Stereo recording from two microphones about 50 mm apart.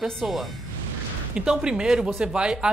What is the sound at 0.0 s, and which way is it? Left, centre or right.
Speech, centre.